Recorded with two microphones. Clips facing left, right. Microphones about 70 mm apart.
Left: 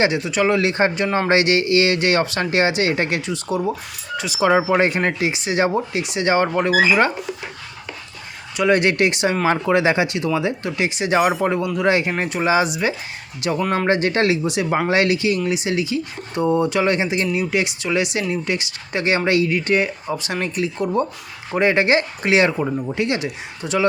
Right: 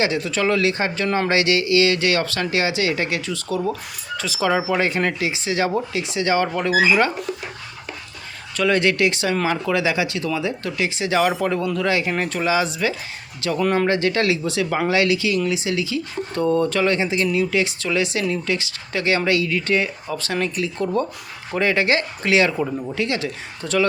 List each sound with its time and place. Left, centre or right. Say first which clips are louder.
0.0 s speech: left 2 dB; centre
8.5 s speech: left 2 dB; left
13.6 s speech: right 3 dB; centre
13.8 s speech: left 1 dB; left